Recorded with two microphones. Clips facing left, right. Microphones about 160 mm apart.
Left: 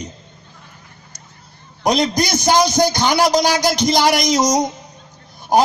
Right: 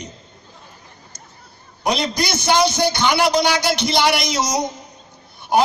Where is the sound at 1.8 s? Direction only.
45° left (ahead or behind).